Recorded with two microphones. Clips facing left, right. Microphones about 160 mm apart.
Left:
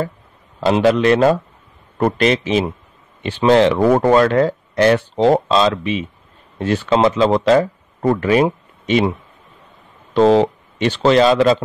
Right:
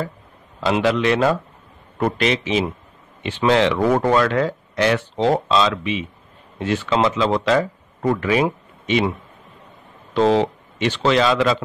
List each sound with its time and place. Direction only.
0.6 s speech: 40° left (ahead or behind)
10.1 s speech: 40° left (ahead or behind)